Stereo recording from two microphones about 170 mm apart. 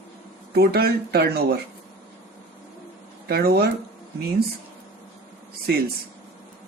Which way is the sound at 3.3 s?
65° right (ahead or behind).